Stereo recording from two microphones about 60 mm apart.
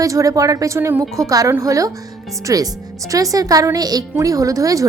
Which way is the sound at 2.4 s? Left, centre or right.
Right.